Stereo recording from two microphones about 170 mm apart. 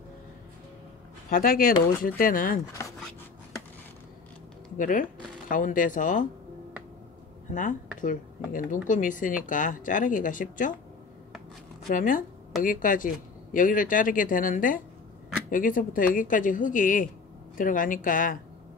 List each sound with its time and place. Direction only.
1.3 s speech: 55° left (ahead or behind)
4.7 s speech: 50° left (ahead or behind)
8.0 s speech: 50° left (ahead or behind)
11.9 s speech: 50° left (ahead or behind)